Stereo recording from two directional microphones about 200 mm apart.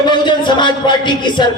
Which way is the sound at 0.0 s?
25° left (ahead or behind).